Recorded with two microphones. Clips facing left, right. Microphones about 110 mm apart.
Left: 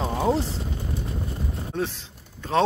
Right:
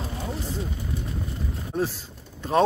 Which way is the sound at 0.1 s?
80° left.